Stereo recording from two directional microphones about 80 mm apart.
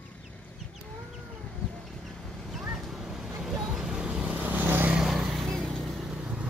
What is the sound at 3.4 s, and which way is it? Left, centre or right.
Vehicle, centre.